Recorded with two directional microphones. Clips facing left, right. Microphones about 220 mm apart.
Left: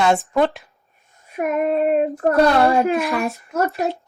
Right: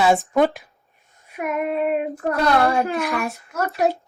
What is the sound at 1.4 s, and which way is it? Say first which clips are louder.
Child singing: left 4 dB; 35° left (ahead or behind).